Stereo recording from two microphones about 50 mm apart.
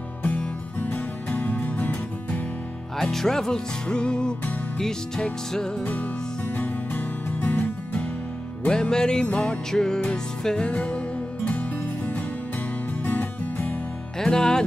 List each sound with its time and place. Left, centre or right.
0.2 s music: left
3.0 s music: centre
5.9 s music: left
8.6 s music: centre
9.7 s music: centre
10.7 s music: left
13.0 s music: left
14.1 s music: centre